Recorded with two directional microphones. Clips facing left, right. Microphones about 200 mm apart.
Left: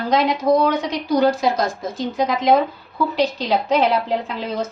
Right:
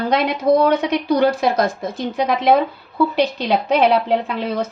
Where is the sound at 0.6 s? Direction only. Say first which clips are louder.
Right 4 dB; 60° right (ahead or behind).